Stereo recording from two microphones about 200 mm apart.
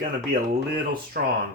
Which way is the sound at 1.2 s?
45° right (ahead or behind).